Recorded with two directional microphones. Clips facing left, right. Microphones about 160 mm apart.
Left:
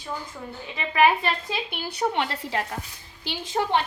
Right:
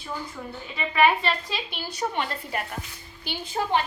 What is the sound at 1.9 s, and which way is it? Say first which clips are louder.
A woman's voice: left 3 dB; 65° left (ahead or behind).